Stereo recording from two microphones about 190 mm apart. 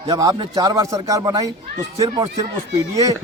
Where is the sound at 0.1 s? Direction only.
15° right (ahead or behind).